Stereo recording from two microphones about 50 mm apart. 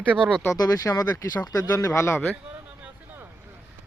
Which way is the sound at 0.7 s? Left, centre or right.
Left.